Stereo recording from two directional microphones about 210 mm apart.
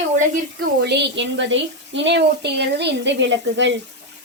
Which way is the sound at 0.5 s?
55° right (ahead or behind).